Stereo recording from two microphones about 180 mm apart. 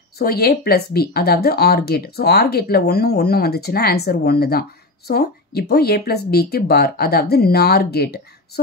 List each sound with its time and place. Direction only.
0.2 s speech: 60° left (ahead or behind)